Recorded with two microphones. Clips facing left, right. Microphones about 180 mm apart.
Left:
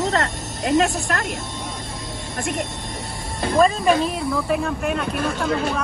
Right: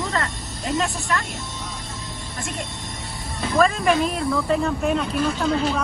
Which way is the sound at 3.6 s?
15° left (ahead or behind).